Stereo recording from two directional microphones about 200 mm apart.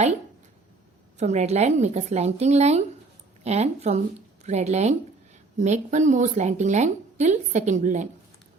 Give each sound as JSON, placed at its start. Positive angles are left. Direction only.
{"t": 1.2, "sound": "a woman's voice", "side_deg": -35}